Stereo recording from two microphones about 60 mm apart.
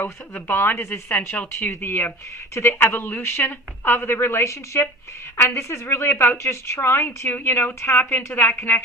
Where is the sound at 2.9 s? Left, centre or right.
Left.